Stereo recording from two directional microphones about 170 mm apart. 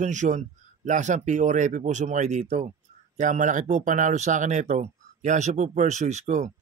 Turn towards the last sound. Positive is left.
turn(degrees=-45)  # may be behind; listen again after turning